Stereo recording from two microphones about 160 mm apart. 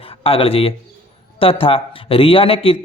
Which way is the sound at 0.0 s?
35° left (ahead or behind).